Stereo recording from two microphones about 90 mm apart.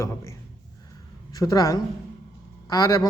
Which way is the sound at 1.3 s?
45° left (ahead or behind).